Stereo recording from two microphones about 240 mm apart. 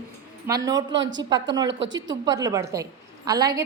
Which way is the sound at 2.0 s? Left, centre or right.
Centre.